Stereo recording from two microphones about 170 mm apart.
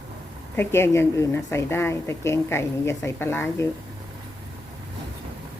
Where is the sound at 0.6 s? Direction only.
15° left (ahead or behind).